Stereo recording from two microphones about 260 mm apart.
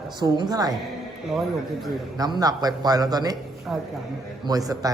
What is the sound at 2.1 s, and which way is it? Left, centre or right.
A man's voice, centre.